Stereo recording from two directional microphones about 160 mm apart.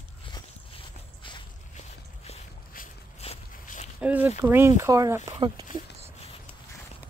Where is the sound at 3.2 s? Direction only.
40° left (ahead or behind).